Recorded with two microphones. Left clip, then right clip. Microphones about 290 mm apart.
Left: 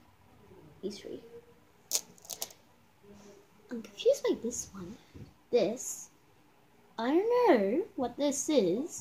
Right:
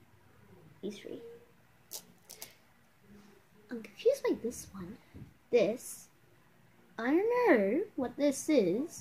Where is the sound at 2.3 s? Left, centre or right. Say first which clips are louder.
Left 9 dB; left.